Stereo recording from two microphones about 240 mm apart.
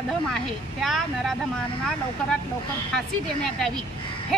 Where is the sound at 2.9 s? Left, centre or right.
Centre.